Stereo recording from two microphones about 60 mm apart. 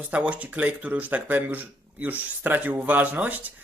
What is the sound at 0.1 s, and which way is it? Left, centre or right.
Speech, right.